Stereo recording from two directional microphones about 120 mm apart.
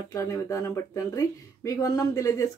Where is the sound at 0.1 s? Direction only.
25° left (ahead or behind).